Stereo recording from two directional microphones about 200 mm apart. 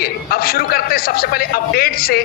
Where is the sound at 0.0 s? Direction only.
50° left (ahead or behind).